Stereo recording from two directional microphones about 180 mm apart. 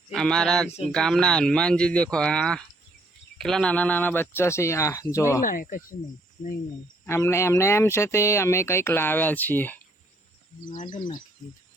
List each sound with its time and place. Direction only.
0.1 s speech: 5° left (ahead or behind)
5.4 s speech: 50° left (ahead or behind)
7.0 s speech: 15° left (ahead or behind)
10.7 s speech: 45° left (ahead or behind)